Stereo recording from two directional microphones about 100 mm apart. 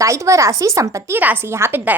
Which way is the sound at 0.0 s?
30° right (ahead or behind).